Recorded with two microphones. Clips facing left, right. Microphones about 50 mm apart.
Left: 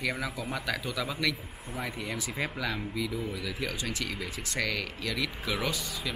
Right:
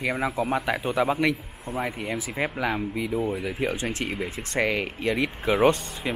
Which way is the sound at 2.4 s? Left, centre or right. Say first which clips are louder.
Right 7 dB; right.